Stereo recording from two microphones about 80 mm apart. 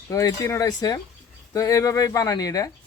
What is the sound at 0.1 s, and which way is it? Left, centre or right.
Speech, left.